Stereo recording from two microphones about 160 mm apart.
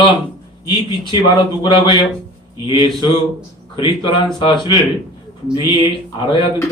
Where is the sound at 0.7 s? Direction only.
30° left (ahead or behind).